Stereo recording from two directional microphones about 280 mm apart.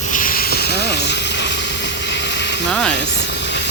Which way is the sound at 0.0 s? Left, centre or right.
Left.